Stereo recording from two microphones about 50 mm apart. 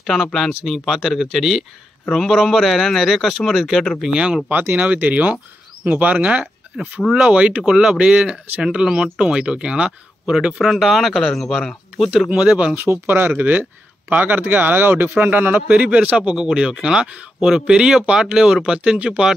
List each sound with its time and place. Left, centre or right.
0.0 s a man's voice: centre
4.1 s speech: centre
4.5 s speech: right
6.7 s a man's voice: centre
7.2 s speech: centre
10.6 s a man's voice: centre
12.7 s speech: right
13.3 s speech: right
15.7 s speech: right